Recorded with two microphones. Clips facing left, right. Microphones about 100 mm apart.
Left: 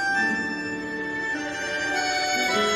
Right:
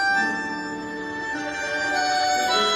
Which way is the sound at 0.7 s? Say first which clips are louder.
Even; 20° right (ahead or behind).